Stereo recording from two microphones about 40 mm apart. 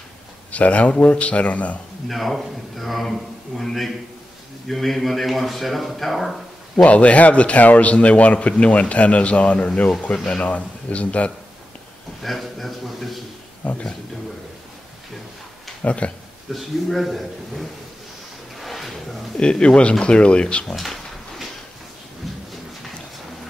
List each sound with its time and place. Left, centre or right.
0.5 s a man's voice: left
2.0 s speech: centre
6.9 s a man's voice: left
10.1 s speech: centre
10.4 s a man's voice: left
12.2 s speech: centre
13.6 s a man's voice: left
15.8 s speech: left
16.5 s speech: centre
18.6 s a sound: centre
19.5 s speech: left
20.6 s a sound: centre